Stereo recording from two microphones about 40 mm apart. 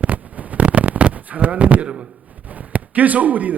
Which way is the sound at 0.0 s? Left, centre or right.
Right.